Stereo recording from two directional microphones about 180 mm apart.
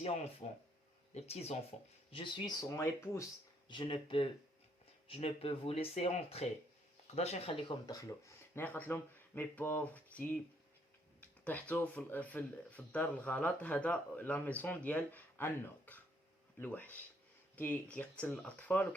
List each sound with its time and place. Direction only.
0.4 s speech: 40° left (ahead or behind); by 3.2 s 15° left (ahead or behind)
3.7 s speech: 25° left (ahead or behind)
7.9 s speech: 20° left (ahead or behind)
11.2 s a sound: 10° left (ahead or behind)
11.7 s speech: 10° left (ahead or behind)